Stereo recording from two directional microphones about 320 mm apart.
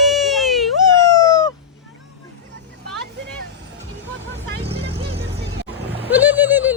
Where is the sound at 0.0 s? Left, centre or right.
Centre.